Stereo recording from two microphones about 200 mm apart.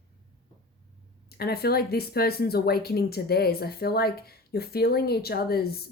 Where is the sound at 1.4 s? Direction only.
50° left (ahead or behind).